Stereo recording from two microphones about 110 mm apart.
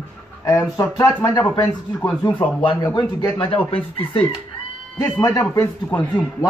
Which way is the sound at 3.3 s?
55° left (ahead or behind).